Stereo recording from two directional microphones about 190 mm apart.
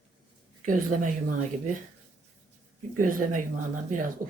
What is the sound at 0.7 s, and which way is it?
Speech, 45° right (ahead or behind).